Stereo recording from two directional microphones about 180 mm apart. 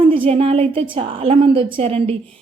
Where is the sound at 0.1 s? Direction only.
30° right (ahead or behind).